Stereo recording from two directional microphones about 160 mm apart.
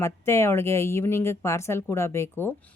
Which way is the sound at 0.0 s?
15° left (ahead or behind).